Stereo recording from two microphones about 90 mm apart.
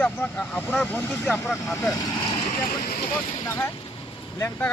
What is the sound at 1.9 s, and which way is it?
Speech, 40° left (ahead or behind).